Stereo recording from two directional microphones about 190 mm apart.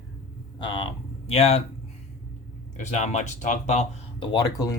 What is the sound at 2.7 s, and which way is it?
Speech, 40° left (ahead or behind).